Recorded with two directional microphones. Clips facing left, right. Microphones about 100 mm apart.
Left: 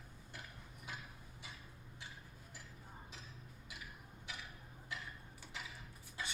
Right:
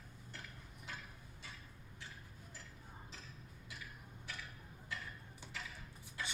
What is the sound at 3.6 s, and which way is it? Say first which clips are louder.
Tick-tock: right 1 dB; 15° left (ahead or behind).